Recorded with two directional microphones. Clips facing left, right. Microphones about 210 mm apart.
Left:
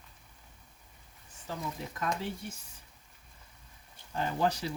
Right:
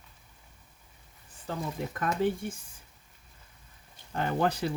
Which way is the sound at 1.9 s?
55° right (ahead or behind).